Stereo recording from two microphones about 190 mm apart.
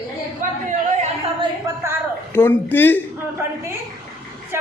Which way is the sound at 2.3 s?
10° left (ahead or behind).